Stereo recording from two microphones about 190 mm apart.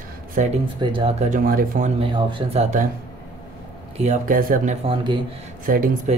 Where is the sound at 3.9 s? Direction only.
35° right (ahead or behind).